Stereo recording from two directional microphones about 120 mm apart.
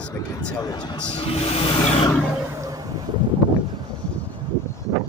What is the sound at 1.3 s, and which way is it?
Vehicle, 55° left (ahead or behind).